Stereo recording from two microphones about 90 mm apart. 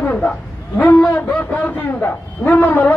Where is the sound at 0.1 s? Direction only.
10° left (ahead or behind).